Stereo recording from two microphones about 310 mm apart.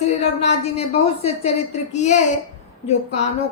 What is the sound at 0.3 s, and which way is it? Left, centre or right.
A woman's voice, centre.